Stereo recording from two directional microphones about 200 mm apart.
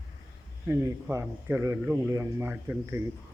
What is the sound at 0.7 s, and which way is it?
Speech, 15° right (ahead or behind).